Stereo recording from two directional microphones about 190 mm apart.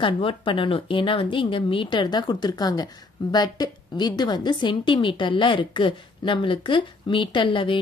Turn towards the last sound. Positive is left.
turn(degrees=25)  # may be behind; listen again after turning